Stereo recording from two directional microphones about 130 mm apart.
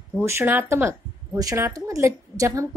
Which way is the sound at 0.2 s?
20° right (ahead or behind).